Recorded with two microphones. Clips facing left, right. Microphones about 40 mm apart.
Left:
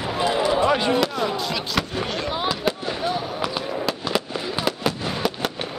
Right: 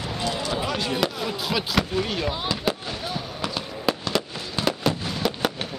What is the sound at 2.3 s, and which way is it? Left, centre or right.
Fireworks, centre.